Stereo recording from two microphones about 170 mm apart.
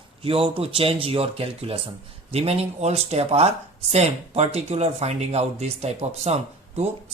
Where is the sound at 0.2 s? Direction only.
35° right (ahead or behind).